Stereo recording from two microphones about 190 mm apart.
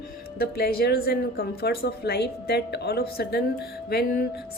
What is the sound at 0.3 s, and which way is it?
Speech, 55° left (ahead or behind).